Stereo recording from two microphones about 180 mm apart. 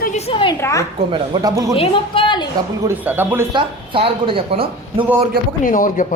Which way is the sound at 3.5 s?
30° right (ahead or behind).